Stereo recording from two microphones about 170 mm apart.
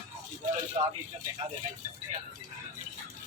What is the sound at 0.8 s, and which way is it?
Speech, 35° right (ahead or behind).